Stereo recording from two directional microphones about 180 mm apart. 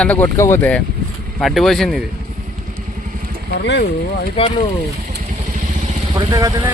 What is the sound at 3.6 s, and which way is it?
Speech, 75° left (ahead or behind).